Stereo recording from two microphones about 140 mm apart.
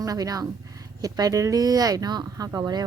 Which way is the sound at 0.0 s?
25° right (ahead or behind).